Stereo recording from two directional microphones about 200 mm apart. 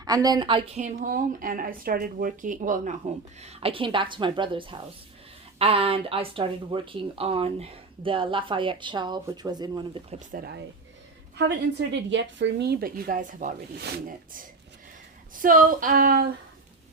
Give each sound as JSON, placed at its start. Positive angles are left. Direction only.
{"t": 0.0, "sound": "speech", "side_deg": -20}
{"t": 0.8, "sound": "speech", "side_deg": -35}
{"t": 10.3, "sound": "speech", "side_deg": -50}
{"t": 11.9, "sound": "speech", "side_deg": -65}
{"t": 15.4, "sound": "speech", "side_deg": -45}